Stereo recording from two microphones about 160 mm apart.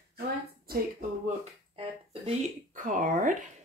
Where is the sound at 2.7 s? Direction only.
55° right (ahead or behind).